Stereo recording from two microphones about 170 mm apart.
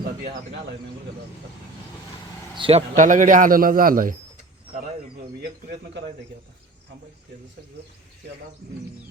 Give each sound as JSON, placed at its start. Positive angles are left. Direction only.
{"t": 2.6, "sound": "speech", "side_deg": -30}
{"t": 2.9, "sound": "a man's voice", "side_deg": -50}